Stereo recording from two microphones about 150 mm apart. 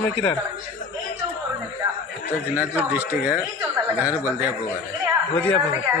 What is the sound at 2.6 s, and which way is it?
Speech, 10° right (ahead or behind).